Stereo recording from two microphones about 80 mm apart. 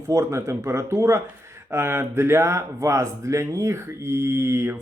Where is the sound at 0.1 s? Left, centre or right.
Right.